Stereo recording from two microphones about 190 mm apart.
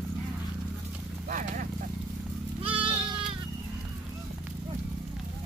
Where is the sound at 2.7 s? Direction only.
30° right (ahead or behind).